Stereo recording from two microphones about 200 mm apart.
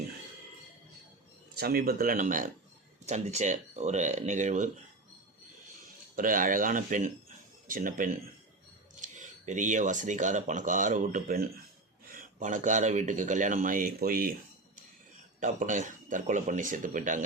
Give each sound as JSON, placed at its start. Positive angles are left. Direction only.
{"t": 1.5, "sound": "speech", "side_deg": -50}
{"t": 6.1, "sound": "speech", "side_deg": -45}
{"t": 15.4, "sound": "speech", "side_deg": -40}